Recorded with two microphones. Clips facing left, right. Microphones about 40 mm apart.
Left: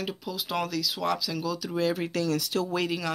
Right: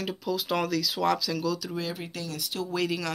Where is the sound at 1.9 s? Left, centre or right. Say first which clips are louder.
Left 8 dB; left.